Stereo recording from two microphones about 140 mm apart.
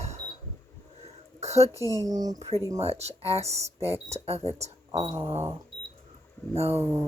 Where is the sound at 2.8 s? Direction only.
50° right (ahead or behind).